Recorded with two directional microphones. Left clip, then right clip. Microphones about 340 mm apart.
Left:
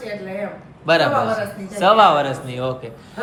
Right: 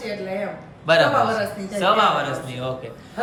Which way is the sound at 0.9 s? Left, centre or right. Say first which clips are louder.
Even; centre.